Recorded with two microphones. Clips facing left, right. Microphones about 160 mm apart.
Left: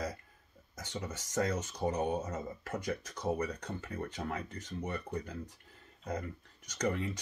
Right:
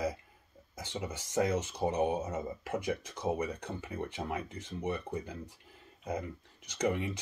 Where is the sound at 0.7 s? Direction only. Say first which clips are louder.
Right 2 dB; 10° right (ahead or behind).